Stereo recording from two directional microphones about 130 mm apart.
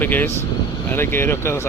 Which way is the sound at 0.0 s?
15° left (ahead or behind).